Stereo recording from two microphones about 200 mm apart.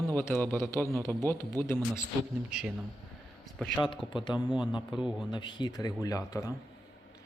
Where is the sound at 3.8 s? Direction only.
25° left (ahead or behind).